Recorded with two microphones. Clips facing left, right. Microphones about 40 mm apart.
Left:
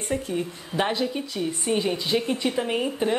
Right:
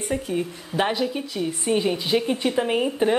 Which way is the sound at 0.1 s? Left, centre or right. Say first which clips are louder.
Right 1 dB; centre.